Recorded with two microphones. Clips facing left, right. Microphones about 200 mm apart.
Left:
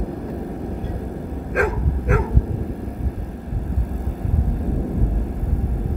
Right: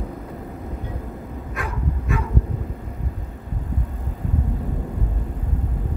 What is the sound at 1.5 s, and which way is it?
Dog, 55° left (ahead or behind).